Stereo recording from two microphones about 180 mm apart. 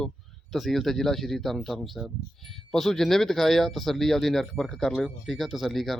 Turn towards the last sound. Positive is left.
turn(degrees=0)  # may be behind; listen again after turning